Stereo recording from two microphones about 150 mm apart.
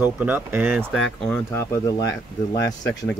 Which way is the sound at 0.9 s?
5° left (ahead or behind).